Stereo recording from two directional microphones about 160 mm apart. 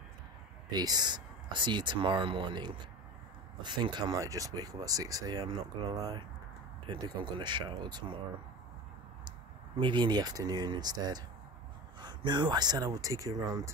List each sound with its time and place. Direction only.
0.7 s speech: 25° right (ahead or behind)
9.8 s speech: 30° right (ahead or behind)